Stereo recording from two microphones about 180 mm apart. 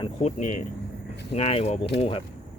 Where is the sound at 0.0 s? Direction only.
40° left (ahead or behind).